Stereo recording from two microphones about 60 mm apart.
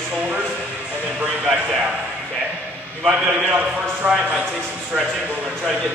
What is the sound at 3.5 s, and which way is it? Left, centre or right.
Speech, right.